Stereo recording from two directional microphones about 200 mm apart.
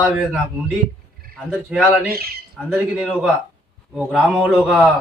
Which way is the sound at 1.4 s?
5° right (ahead or behind).